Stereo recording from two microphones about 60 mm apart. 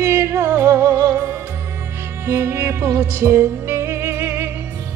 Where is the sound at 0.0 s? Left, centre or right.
Right.